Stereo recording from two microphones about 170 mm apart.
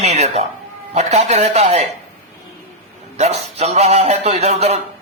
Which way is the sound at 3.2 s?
40° right (ahead or behind).